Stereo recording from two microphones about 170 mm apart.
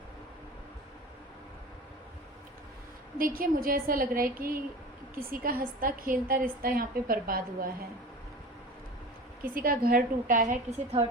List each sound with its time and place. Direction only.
3.2 s a woman's voice: 55° right (ahead or behind)
9.4 s a woman's voice: 60° right (ahead or behind); by 11.0 s 40° right (ahead or behind)